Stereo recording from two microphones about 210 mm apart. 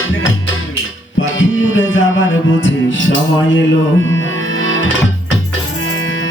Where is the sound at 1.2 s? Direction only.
65° left (ahead or behind).